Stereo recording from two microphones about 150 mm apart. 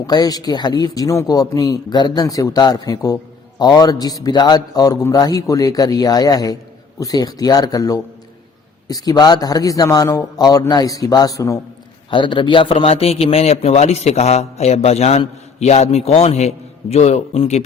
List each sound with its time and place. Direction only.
0.0 s a man's voice: 25° left (ahead or behind)
12.1 s a man's voice: 35° left (ahead or behind)